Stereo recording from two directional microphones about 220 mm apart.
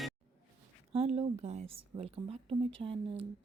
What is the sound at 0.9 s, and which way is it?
Speech, 30° right (ahead or behind).